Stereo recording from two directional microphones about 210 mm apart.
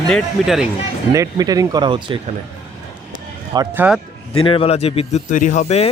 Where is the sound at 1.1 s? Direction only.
15° right (ahead or behind).